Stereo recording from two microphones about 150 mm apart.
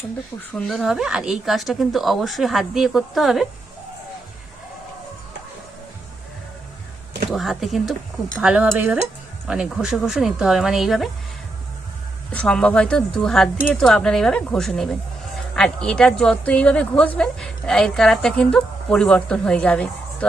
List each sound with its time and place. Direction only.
0.5 s a woman's voice: centre (ahead or behind)
7.3 s a woman's voice: centre (ahead or behind)
12.3 s a woman's voice: 5° left (ahead or behind)